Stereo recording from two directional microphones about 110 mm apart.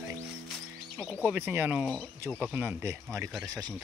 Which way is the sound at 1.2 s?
15° right (ahead or behind).